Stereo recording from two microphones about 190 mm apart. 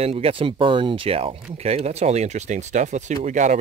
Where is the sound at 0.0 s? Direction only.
30° right (ahead or behind).